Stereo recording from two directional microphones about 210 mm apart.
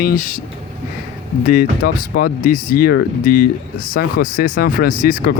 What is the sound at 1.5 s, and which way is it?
Speech, 45° left (ahead or behind).